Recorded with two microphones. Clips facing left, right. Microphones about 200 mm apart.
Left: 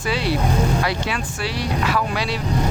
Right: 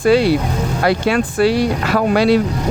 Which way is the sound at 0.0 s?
50° right (ahead or behind).